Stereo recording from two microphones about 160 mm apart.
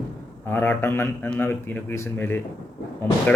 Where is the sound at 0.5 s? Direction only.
10° left (ahead or behind).